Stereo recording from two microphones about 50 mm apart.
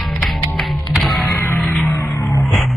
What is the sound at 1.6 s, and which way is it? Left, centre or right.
Music, left.